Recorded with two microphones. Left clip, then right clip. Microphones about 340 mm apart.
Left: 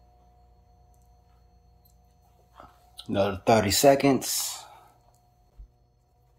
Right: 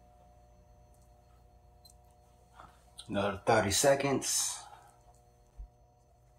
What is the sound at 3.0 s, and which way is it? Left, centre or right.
Speech, left.